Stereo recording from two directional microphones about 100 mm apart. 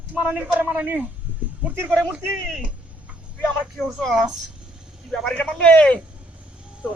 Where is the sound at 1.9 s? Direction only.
Centre (ahead or behind).